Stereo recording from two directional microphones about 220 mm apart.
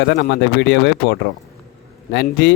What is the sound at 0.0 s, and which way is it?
Speech, 50° left (ahead or behind).